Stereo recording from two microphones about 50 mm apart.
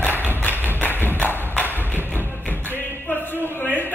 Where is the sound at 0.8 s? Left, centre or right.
Left.